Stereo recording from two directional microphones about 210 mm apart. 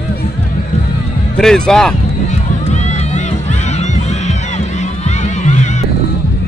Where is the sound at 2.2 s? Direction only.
35° left (ahead or behind).